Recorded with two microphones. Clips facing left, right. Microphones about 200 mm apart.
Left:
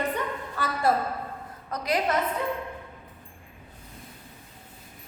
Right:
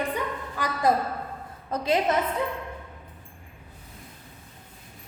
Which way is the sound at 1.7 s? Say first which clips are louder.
Right 3 dB; 25° right (ahead or behind).